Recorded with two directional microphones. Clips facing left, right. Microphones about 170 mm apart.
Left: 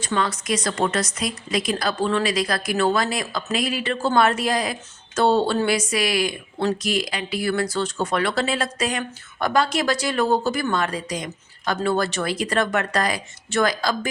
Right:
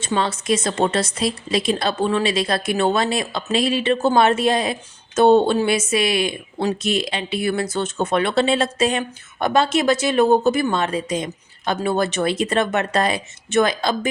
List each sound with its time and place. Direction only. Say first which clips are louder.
0.0 s a woman's voice: right 2 dB; 25° right (ahead or behind)